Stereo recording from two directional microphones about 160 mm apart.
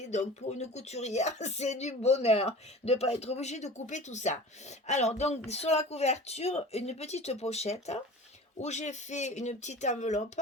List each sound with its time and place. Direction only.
0.0 s speech: 45° left (ahead or behind)